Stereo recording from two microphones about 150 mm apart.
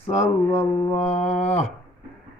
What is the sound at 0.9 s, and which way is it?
Mantra, 45° left (ahead or behind).